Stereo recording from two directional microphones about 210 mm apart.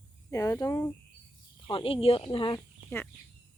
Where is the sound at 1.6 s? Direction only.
25° left (ahead or behind).